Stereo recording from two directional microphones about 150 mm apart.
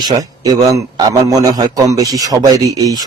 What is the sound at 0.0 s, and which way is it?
A man's voice, 25° right (ahead or behind).